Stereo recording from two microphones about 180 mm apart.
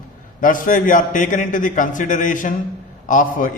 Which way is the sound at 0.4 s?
50° left (ahead or behind).